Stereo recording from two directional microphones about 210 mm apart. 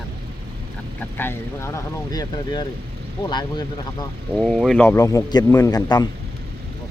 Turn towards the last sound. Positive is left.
turn(degrees=20)  # may be behind; listen again after turning